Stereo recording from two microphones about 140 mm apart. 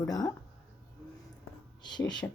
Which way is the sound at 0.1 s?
25° left (ahead or behind).